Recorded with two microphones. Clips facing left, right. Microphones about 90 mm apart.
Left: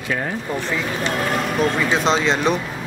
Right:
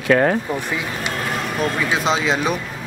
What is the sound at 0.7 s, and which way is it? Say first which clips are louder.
Speech: left 2 dB; 15° right (ahead or behind).